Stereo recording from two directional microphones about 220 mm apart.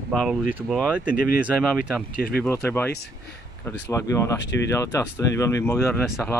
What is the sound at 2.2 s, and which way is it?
Speech, 45° left (ahead or behind).